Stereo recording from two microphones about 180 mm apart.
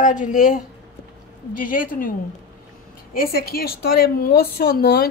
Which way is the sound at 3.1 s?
55° left (ahead or behind).